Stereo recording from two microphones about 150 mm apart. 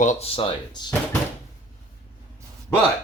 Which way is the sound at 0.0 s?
50° left (ahead or behind).